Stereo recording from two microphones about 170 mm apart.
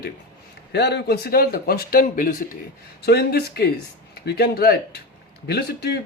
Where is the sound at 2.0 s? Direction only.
50° left (ahead or behind).